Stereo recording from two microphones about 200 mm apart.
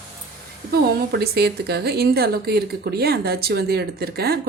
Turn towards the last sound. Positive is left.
turn(degrees=-50)  # may be behind; listen again after turning